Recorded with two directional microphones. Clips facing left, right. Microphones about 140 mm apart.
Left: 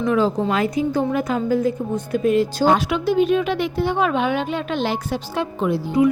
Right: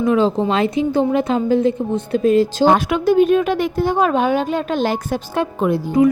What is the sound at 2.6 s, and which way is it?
A woman's voice, 50° right (ahead or behind).